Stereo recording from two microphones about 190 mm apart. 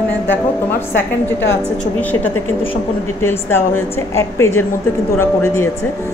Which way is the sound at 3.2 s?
10° left (ahead or behind).